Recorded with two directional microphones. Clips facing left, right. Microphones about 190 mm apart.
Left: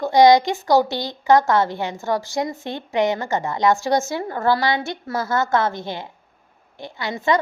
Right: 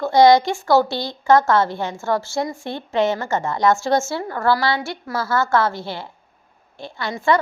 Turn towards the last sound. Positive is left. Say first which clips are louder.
# right 1 dB
turn(degrees=20)  # may be behind; listen again after turning